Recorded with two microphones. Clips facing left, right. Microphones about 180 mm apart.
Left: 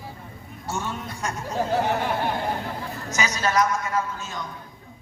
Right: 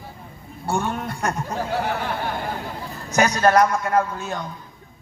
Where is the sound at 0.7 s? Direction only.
55° right (ahead or behind).